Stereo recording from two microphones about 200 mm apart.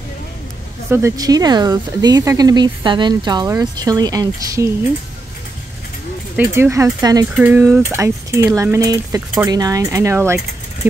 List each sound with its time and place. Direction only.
0.8 s speech: 15° right (ahead or behind)
6.3 s speech: 10° right (ahead or behind)